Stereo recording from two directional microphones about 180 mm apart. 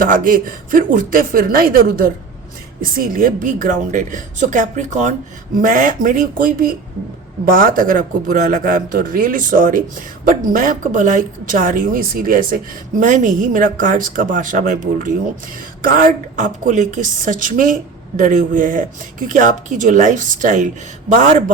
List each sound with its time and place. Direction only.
0.0 s speech: 50° right (ahead or behind)